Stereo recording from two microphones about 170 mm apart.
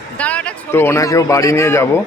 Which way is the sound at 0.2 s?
10° left (ahead or behind).